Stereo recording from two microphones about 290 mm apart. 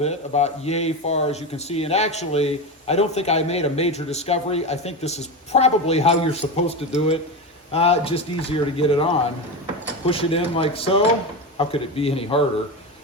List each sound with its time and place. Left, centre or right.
0.0 s speech: left